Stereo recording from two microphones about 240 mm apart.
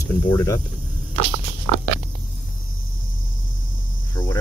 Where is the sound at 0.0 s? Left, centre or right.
Centre.